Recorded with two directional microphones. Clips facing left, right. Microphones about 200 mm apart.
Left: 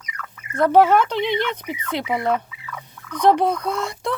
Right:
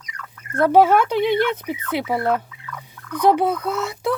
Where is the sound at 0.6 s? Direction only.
10° right (ahead or behind).